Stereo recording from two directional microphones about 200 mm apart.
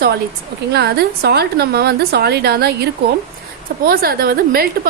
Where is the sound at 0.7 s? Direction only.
55° right (ahead or behind).